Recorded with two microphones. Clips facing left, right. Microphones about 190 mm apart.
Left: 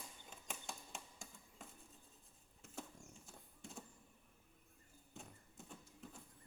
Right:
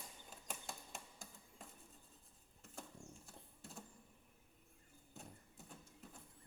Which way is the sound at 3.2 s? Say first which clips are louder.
Left 1 dB; centre (ahead or behind).